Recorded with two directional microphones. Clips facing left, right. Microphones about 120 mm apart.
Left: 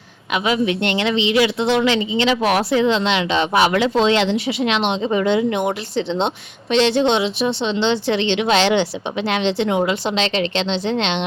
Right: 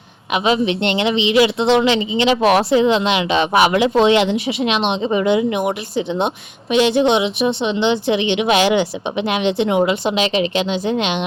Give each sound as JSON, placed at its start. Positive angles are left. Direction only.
{"t": 0.3, "sound": "a woman's voice", "side_deg": -25}